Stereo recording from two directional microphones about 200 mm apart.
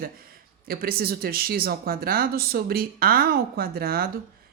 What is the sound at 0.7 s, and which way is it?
Speech, 50° right (ahead or behind).